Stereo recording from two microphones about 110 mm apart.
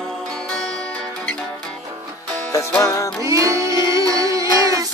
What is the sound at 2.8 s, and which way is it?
Music, 30° left (ahead or behind).